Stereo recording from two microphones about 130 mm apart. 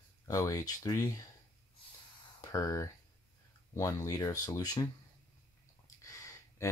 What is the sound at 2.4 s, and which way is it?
Speech, 25° left (ahead or behind).